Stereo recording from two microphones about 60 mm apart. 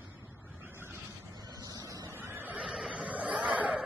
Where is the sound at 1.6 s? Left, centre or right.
Right.